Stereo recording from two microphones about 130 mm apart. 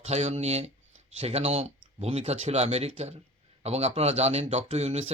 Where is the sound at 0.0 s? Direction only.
55° right (ahead or behind).